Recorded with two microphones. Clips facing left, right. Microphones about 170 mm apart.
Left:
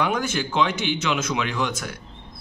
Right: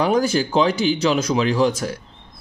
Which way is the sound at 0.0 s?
35° right (ahead or behind).